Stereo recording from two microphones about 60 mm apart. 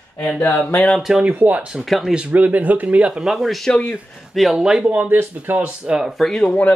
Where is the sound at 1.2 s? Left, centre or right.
Right.